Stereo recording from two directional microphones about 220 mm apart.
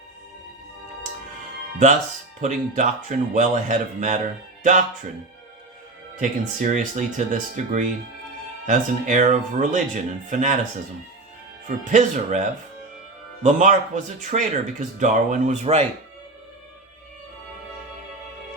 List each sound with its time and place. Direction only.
2.4 s speech: 35° right (ahead or behind)
6.1 s speech: 35° right (ahead or behind)
11.9 s speech: 35° right (ahead or behind)
13.4 s speech: 35° right (ahead or behind)